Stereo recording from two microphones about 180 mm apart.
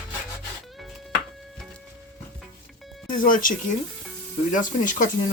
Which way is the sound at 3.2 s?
50° left (ahead or behind).